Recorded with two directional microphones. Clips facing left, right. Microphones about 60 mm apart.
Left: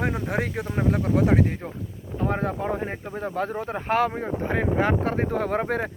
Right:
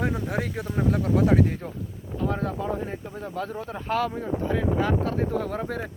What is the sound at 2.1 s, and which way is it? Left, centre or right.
Speech, left.